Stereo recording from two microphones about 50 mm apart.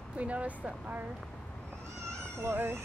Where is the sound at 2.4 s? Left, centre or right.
Right.